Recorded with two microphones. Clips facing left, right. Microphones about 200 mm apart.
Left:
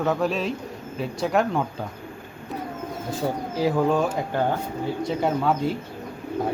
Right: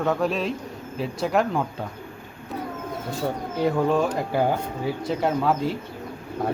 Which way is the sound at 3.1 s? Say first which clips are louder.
Left 1 dB; centre (ahead or behind).